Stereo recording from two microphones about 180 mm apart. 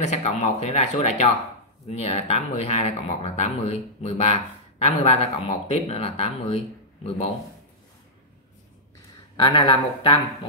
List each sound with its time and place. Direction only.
0.0 s speech: 40° left (ahead or behind)
9.4 s speech: 25° left (ahead or behind)